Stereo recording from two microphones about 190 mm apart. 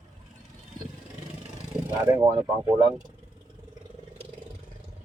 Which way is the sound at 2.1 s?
20° right (ahead or behind).